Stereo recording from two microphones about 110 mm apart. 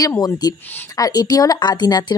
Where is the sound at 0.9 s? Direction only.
35° left (ahead or behind).